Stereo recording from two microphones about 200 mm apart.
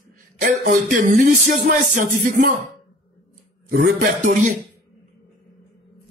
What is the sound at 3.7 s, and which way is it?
Speech, 45° right (ahead or behind).